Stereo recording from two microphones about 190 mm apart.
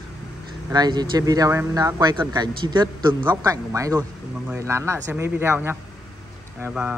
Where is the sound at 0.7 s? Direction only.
20° right (ahead or behind).